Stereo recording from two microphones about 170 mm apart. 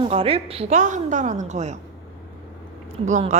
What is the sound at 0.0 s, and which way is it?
A woman's voice, 35° right (ahead or behind).